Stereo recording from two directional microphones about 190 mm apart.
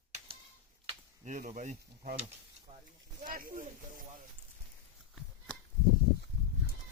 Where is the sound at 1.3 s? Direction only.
40° right (ahead or behind).